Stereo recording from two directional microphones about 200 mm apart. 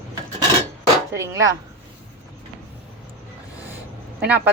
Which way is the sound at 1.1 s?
15° right (ahead or behind).